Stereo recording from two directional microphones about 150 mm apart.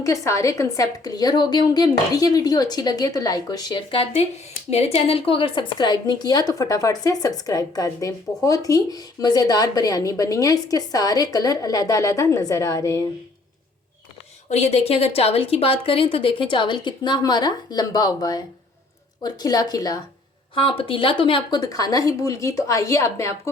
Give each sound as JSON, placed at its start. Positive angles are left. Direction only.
{"t": 0.0, "sound": "a woman's voice", "side_deg": 20}
{"t": 14.5, "sound": "a woman's voice", "side_deg": 45}
{"t": 20.6, "sound": "a woman's voice", "side_deg": 35}